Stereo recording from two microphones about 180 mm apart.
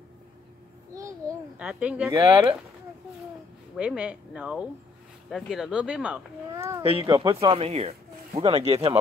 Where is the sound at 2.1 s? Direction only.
20° right (ahead or behind).